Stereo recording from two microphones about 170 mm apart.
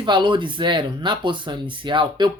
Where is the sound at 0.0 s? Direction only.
25° right (ahead or behind).